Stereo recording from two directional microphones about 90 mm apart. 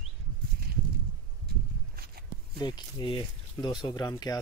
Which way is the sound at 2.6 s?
50° left (ahead or behind).